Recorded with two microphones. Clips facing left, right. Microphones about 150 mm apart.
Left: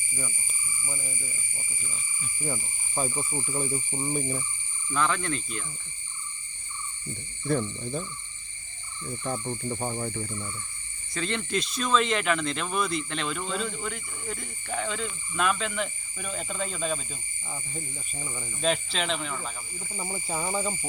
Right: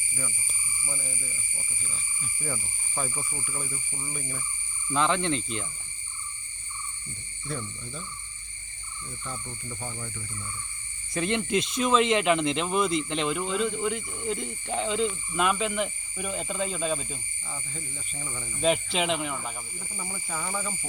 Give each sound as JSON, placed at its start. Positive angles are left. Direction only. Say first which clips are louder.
{"t": 0.4, "sound": "speech", "louder": "even", "side_deg": 5}
{"t": 2.4, "sound": "speech", "louder": "left 2 dB", "side_deg": 20}
{"t": 4.9, "sound": "speech", "louder": "right 2 dB", "side_deg": -20}
{"t": 7.4, "sound": "speech", "louder": "left 9 dB", "side_deg": 55}
{"t": 9.2, "sound": "speech", "louder": "left 9 dB", "side_deg": 55}
{"t": 11.1, "sound": "speech", "louder": "right 3 dB", "side_deg": -15}
{"t": 17.5, "sound": "speech", "louder": "left 2 dB", "side_deg": 10}
{"t": 18.6, "sound": "speech", "louder": "right 3 dB", "side_deg": -15}
{"t": 20.0, "sound": "speech", "louder": "left 4 dB", "side_deg": 25}